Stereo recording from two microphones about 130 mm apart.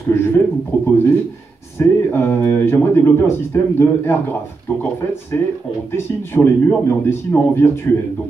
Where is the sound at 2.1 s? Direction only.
20° left (ahead or behind).